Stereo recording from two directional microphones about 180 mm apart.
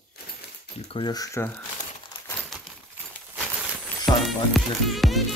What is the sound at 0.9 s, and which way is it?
Speech, 25° left (ahead or behind).